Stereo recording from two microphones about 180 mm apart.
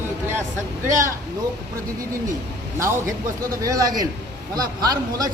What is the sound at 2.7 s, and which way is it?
A man's voice, 15° right (ahead or behind).